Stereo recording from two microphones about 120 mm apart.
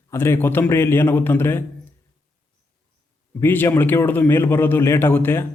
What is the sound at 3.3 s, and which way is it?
A man's voice, 20° left (ahead or behind).